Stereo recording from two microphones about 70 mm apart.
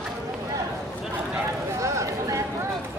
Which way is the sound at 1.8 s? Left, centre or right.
Right.